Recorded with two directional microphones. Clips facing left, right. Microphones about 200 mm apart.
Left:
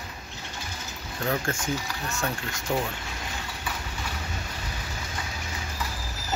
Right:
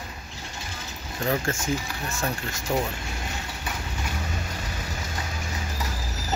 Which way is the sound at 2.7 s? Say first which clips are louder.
Right 2 dB; 5° right (ahead or behind).